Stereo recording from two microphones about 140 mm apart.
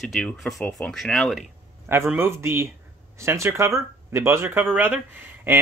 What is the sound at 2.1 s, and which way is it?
Speech, 15° right (ahead or behind).